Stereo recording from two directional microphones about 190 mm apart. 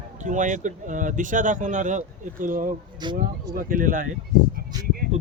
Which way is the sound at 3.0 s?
20° right (ahead or behind).